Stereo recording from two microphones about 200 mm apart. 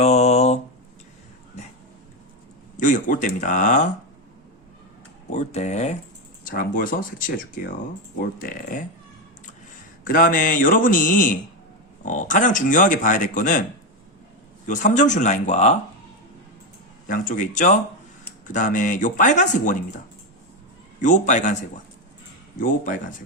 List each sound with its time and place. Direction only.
0.0 s mantra: 30° left (ahead or behind)
2.7 s speech: 40° left (ahead or behind)
5.3 s speech: 35° left (ahead or behind)
6.5 s speech: 45° left (ahead or behind)
10.0 s speech: 45° left (ahead or behind)
14.7 s speech: 40° left (ahead or behind)
17.1 s speech: 40° left (ahead or behind)
21.0 s speech: 40° left (ahead or behind)
22.6 s speech: 40° left (ahead or behind)